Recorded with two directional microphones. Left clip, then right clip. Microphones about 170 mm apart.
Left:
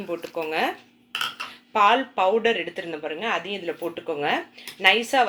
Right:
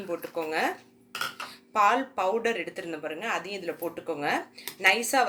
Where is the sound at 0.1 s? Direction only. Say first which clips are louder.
Left 3 dB; 35° left (ahead or behind).